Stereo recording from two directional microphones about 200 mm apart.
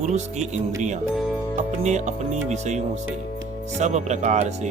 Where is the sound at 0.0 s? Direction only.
35° right (ahead or behind).